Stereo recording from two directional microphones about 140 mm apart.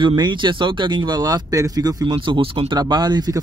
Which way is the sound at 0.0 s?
35° right (ahead or behind).